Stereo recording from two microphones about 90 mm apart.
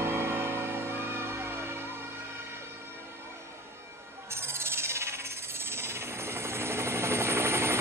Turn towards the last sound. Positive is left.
turn(degrees=-30)  # may be behind; listen again after turning